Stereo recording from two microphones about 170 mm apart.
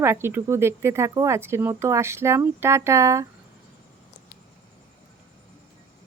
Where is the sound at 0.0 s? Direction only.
15° right (ahead or behind).